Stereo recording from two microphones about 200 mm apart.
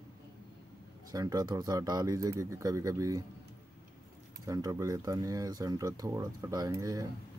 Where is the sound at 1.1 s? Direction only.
20° right (ahead or behind).